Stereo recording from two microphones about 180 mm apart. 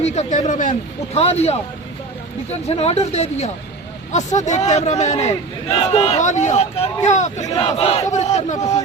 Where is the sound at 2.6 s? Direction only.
35° left (ahead or behind).